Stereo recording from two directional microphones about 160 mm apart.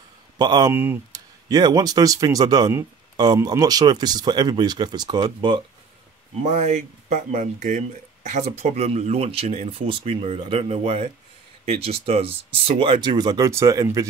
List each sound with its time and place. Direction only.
0.4 s speech: 25° right (ahead or behind)
6.4 s speech: 45° right (ahead or behind); by 14.0 s 20° right (ahead or behind)